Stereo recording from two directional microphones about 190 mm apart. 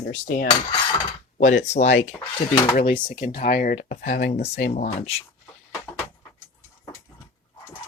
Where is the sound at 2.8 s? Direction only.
45° left (ahead or behind).